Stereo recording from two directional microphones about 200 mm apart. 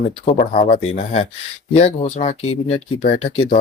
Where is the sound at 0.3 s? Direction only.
40° left (ahead or behind).